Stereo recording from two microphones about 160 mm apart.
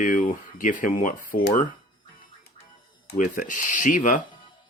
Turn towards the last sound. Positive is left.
turn(degrees=55)  # may be behind; listen again after turning